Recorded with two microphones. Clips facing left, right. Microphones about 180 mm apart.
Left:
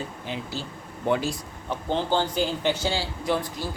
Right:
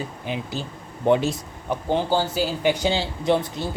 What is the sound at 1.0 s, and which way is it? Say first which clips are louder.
Speech: right 5 dB; 20° right (ahead or behind).